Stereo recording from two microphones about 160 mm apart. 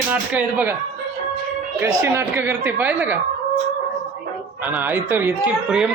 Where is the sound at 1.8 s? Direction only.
15° right (ahead or behind).